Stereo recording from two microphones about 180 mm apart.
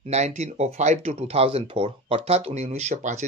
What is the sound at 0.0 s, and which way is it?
Speech, 40° right (ahead or behind).